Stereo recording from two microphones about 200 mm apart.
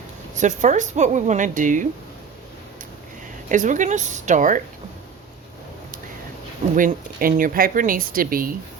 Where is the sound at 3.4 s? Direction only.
40° right (ahead or behind).